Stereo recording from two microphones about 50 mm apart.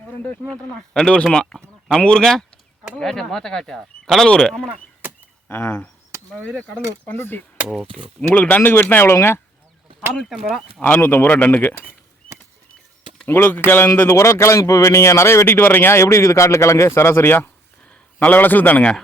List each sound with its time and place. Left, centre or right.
0.9 s speech: centre
5.5 s speech: left
6.4 s speech: left
7.2 s speech: left
7.9 s speech: left
10.2 s speech: centre
10.8 s speech: left
11.3 s speech: left
13.2 s speech: left
14.1 s speech: left
15.4 s speech: left
17.8 s a man's voice: left